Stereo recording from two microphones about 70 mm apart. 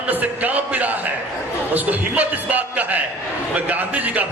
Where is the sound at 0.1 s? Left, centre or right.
Right.